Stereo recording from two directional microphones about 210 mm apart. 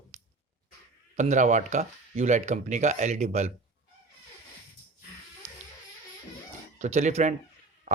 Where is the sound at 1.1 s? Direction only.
35° right (ahead or behind).